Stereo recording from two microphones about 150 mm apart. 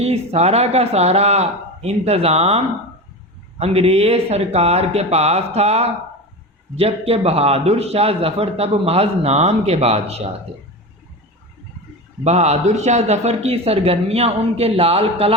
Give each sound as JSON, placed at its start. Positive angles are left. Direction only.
{"t": 0.0, "sound": "a man's voice", "side_deg": -45}
{"t": 3.6, "sound": "a man's voice", "side_deg": -45}
{"t": 12.2, "sound": "a man's voice", "side_deg": -45}